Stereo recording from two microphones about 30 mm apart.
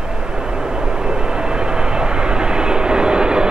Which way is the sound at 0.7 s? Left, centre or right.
Right.